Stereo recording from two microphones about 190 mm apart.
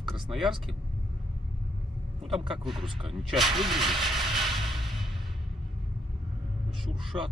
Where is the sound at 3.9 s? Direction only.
Centre (ahead or behind).